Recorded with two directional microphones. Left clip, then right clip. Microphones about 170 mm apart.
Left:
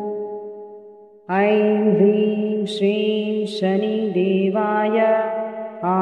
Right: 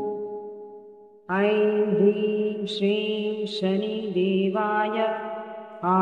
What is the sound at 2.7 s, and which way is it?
Music, 40° left (ahead or behind).